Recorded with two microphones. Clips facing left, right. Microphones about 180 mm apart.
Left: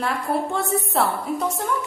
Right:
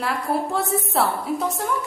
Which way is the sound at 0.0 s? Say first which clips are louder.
Even; centre (ahead or behind).